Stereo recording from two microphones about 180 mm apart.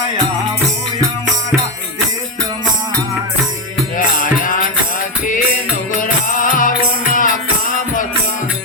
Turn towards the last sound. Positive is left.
turn(degrees=45)  # may be behind; listen again after turning